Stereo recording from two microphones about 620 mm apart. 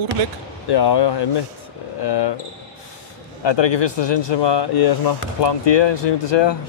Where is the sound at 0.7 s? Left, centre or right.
Left.